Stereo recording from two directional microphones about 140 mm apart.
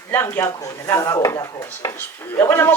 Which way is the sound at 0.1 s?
15° left (ahead or behind).